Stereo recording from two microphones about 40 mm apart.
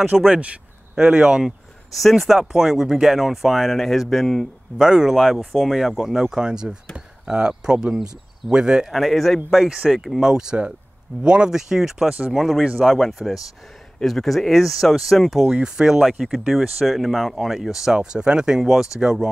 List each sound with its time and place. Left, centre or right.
0.1 s speech: centre
0.9 s speech: right
2.0 s speech: centre
4.7 s speech: centre
5.1 s speech: centre
5.8 s speech: centre
8.9 s speech: centre
10.2 s speech: centre
11.5 s speech: centre
15.4 s speech: centre
16.8 s speech: centre
18.6 s speech: centre
18.9 s speech: centre